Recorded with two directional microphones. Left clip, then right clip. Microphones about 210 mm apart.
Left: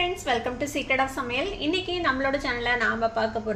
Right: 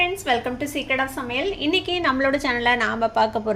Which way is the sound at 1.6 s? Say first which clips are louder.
Right 4 dB; 30° right (ahead or behind).